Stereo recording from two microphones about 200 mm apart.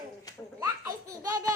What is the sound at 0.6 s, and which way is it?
Baby laughter, 15° right (ahead or behind).